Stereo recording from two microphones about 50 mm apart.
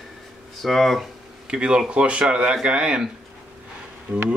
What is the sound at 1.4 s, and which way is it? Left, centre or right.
Speech, centre.